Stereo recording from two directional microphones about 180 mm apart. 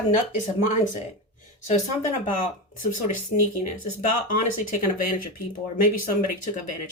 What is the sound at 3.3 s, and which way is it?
Speech, 40° left (ahead or behind).